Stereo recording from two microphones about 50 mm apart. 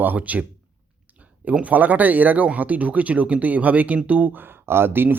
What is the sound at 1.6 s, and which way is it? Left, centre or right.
Speech, right.